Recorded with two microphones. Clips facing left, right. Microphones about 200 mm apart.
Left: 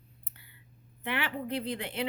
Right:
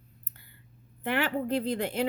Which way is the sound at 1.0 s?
45° right (ahead or behind).